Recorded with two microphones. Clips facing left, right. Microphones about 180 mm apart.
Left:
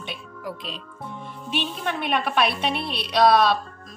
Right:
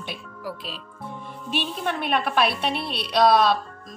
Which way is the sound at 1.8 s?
Centre (ahead or behind).